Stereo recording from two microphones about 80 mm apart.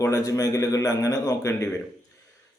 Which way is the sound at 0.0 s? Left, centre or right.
Left.